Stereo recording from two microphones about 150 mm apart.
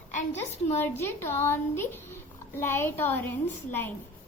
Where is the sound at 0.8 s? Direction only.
15° left (ahead or behind).